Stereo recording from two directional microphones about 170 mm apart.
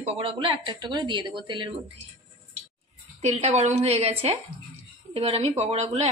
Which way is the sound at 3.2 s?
40° right (ahead or behind).